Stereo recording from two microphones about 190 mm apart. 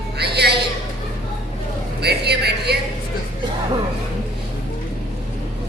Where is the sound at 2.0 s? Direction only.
60° right (ahead or behind).